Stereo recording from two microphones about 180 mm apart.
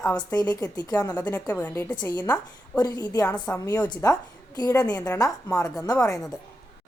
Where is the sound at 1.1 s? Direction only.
10° left (ahead or behind).